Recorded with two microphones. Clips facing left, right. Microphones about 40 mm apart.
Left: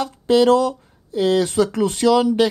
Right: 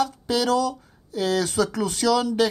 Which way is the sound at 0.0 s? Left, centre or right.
Left.